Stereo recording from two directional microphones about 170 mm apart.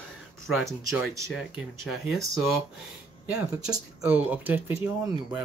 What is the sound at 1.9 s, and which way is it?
Speech, 15° right (ahead or behind).